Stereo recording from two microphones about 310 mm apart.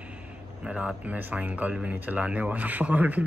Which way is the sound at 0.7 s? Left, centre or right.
Centre.